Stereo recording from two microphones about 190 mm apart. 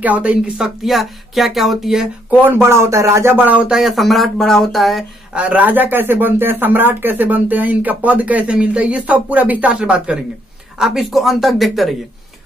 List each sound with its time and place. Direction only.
0.0 s speech: 10° right (ahead or behind)